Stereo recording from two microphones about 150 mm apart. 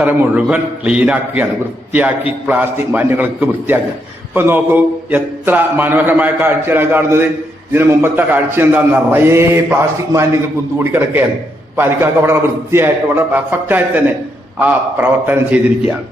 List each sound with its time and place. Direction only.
0.0 s a man's voice: 10° right (ahead or behind)
15.3 s a man's voice: 10° right (ahead or behind)